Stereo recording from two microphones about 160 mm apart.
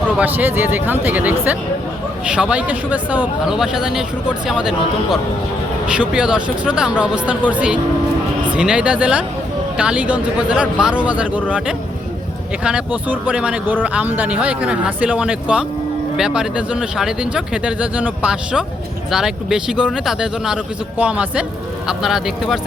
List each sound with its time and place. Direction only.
0.2 s speech: 10° right (ahead or behind)
5.9 s speech: 5° right (ahead or behind)